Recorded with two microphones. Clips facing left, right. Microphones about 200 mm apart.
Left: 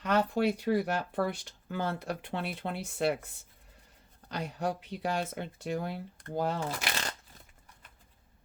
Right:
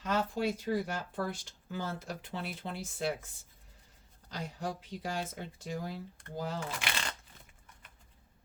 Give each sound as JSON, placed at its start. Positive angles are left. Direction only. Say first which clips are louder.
{"t": 0.0, "sound": "speech", "louder": "left 4 dB", "side_deg": 65}
{"t": 4.3, "sound": "speech", "louder": "left 5 dB", "side_deg": 65}
{"t": 6.7, "sound": "speech", "louder": "left 3 dB", "side_deg": 40}